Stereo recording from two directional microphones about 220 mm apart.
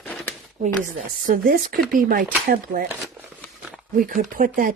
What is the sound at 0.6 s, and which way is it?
Speech, 35° right (ahead or behind).